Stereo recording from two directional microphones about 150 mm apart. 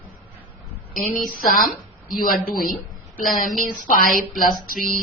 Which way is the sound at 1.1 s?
70° left (ahead or behind).